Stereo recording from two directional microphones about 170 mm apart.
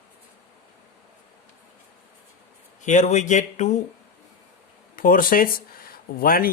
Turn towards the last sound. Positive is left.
turn(degrees=60)  # may be behind; listen again after turning